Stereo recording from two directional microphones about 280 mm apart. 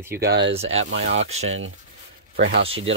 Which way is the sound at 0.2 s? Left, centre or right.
Right.